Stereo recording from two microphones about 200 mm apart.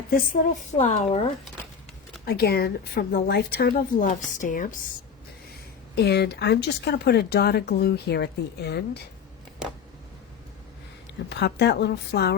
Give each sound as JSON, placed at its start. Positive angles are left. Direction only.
{"t": 0.1, "sound": "a woman's voice", "side_deg": 45}
{"t": 2.2, "sound": "a woman's voice", "side_deg": 50}
{"t": 5.9, "sound": "speech", "side_deg": 55}
{"t": 11.3, "sound": "speech", "side_deg": 55}